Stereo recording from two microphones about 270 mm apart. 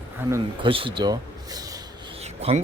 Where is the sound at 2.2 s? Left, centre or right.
Right.